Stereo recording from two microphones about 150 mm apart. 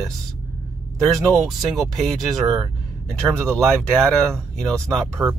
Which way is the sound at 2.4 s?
25° right (ahead or behind).